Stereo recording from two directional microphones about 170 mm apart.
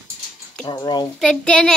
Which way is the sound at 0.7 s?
25° left (ahead or behind).